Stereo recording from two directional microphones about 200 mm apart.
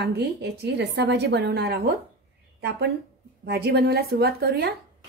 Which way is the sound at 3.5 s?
55° right (ahead or behind).